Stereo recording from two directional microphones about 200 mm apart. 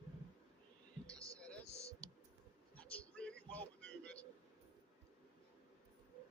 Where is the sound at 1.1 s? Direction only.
15° right (ahead or behind).